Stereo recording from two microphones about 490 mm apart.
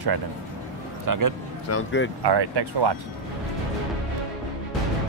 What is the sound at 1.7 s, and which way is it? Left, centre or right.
Speech, left.